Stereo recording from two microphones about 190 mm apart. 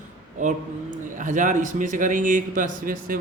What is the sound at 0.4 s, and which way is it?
A man's voice, 40° right (ahead or behind).